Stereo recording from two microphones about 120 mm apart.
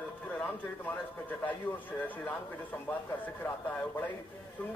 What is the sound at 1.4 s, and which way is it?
A man's voice, 15° left (ahead or behind).